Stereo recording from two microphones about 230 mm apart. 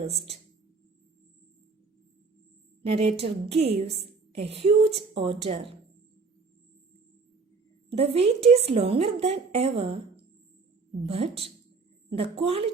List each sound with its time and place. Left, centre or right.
2.9 s a woman's voice: right
7.9 s a woman's voice: right
11.0 s a woman's voice: right